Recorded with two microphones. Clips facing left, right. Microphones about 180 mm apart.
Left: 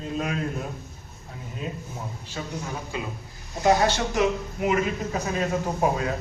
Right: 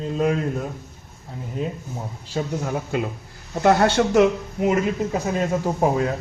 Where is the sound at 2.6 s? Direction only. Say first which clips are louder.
Right 7 dB; 55° right (ahead or behind).